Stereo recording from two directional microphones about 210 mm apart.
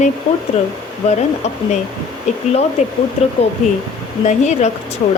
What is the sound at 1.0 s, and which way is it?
Speech, 30° left (ahead or behind).